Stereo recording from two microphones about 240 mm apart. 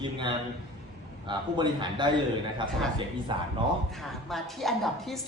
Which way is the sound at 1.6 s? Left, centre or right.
Centre.